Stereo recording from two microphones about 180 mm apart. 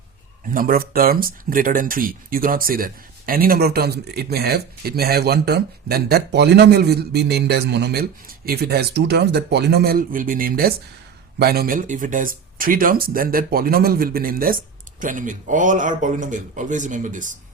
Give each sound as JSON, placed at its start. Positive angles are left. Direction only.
{"t": 0.4, "sound": "speech", "side_deg": -50}